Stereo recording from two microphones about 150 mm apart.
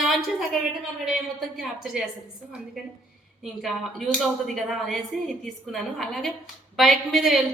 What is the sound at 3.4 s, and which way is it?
A woman's voice, centre (ahead or behind).